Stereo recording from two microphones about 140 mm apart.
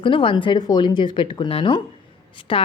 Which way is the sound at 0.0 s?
40° left (ahead or behind).